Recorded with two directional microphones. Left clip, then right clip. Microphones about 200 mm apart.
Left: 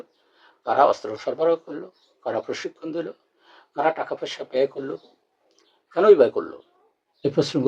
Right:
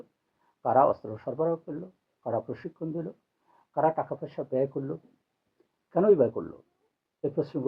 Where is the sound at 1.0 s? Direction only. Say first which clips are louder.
Left 7 dB; 25° left (ahead or behind).